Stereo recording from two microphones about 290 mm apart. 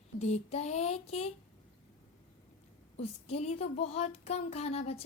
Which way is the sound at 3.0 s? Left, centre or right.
Left.